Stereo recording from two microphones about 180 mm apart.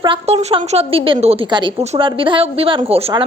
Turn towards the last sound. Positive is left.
turn(degrees=-30)  # may be behind; listen again after turning